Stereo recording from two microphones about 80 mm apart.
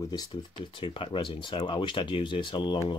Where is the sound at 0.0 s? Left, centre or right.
Left.